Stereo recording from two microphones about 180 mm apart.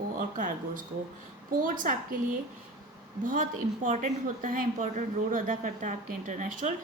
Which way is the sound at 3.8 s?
40° right (ahead or behind).